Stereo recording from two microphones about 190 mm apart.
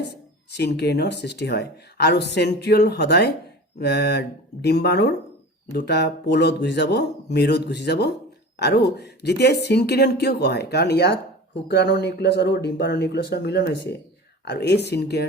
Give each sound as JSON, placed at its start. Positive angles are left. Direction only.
{"t": 0.5, "sound": "speech", "side_deg": 60}